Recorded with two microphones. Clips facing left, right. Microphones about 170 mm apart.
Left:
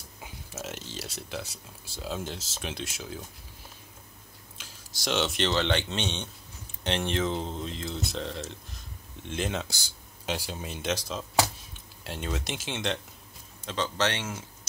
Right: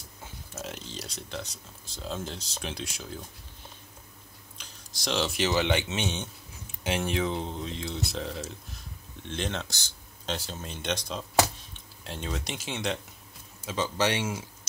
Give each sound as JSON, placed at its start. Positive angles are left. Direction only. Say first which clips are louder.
{"t": 0.2, "sound": "speech", "louder": "even", "side_deg": 5}
{"t": 4.6, "sound": "speech", "louder": "left 1 dB", "side_deg": 5}